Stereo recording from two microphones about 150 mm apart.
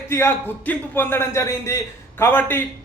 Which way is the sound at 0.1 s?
15° left (ahead or behind).